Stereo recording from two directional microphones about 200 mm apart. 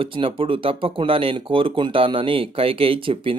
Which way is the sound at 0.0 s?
25° right (ahead or behind).